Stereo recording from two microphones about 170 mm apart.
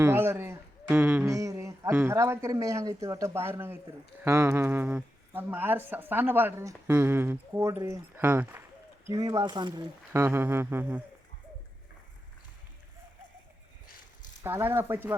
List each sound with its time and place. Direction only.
0.0 s speech: 15° right (ahead or behind)
10.1 s speech: 15° right (ahead or behind)
14.4 s speech: 15° right (ahead or behind)